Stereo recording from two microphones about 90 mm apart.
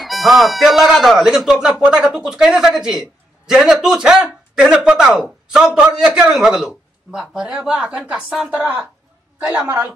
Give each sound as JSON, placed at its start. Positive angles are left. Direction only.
{"t": 0.0, "sound": "a man's voice", "side_deg": 0}